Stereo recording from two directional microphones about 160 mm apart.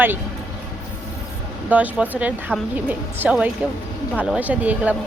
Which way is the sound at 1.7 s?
10° right (ahead or behind).